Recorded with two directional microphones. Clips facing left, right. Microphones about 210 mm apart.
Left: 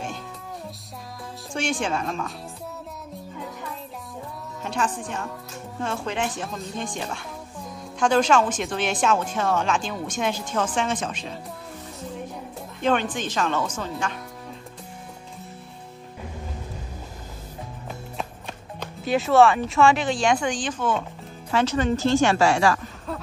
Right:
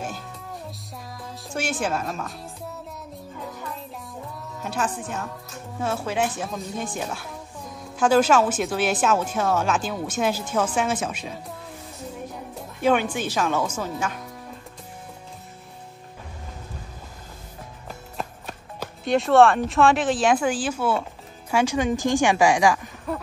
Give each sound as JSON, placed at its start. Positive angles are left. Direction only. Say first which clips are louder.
{"t": 1.5, "sound": "a woman's voice", "louder": "even", "side_deg": -5}
{"t": 4.6, "sound": "a woman's voice", "louder": "even", "side_deg": -5}
{"t": 12.8, "sound": "a woman's voice", "louder": "right 2 dB", "side_deg": -10}
{"t": 17.8, "sound": "a woman's voice", "louder": "even", "side_deg": 0}